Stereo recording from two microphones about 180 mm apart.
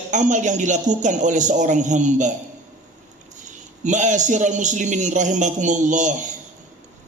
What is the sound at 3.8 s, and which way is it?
Speech, 45° right (ahead or behind).